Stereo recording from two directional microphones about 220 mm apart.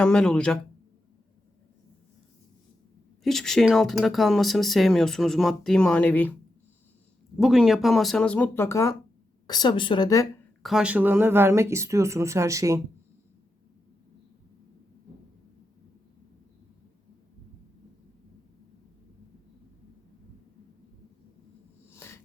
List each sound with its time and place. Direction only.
0.0 s speech: 5° left (ahead or behind)
3.2 s speech: centre (ahead or behind)
7.3 s speech: centre (ahead or behind); by 10.2 s 15° left (ahead or behind)
10.6 s speech: centre (ahead or behind)
21.9 s a sound: 10° left (ahead or behind)